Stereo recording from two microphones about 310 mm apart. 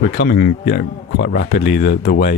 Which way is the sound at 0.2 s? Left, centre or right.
Left.